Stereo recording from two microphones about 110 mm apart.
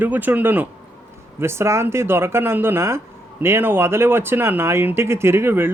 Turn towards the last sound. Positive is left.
turn(degrees=-20)  # may be behind; listen again after turning